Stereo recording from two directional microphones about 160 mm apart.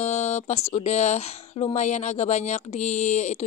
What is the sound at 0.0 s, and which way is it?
Speech, 45° left (ahead or behind).